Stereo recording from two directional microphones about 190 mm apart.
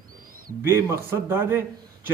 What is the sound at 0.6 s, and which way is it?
A man's voice, 15° right (ahead or behind).